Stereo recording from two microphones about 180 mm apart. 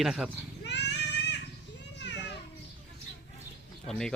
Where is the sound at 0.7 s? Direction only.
70° left (ahead or behind).